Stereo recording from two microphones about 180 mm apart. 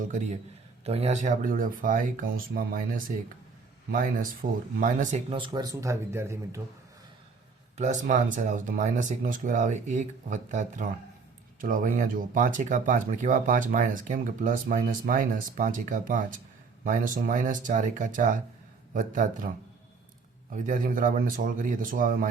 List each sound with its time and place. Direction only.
0.9 s speech: 35° right (ahead or behind)
5.3 s speech: 25° right (ahead or behind)
7.8 s speech: 45° right (ahead or behind)
20.5 s speech: 50° right (ahead or behind)